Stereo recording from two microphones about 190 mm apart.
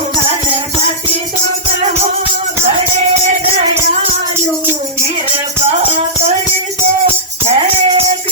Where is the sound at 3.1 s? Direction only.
35° right (ahead or behind).